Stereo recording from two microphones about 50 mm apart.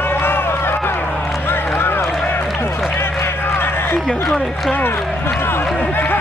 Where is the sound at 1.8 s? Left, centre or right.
Left.